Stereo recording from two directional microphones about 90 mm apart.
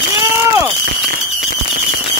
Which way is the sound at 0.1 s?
35° right (ahead or behind).